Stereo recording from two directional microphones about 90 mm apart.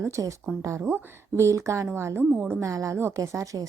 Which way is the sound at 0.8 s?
20° right (ahead or behind).